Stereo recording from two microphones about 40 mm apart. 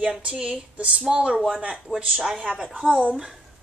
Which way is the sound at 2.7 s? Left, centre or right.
Right.